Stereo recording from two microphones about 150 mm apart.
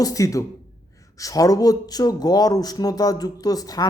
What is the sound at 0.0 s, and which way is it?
Speech, 20° left (ahead or behind).